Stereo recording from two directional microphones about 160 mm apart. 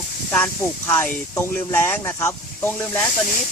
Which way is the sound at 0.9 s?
10° left (ahead or behind).